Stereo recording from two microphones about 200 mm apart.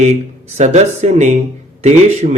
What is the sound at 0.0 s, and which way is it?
Speech, 35° right (ahead or behind).